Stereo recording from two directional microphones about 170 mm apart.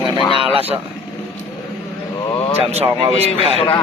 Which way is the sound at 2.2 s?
30° left (ahead or behind).